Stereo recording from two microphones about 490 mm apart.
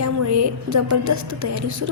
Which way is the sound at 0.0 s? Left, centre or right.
Right.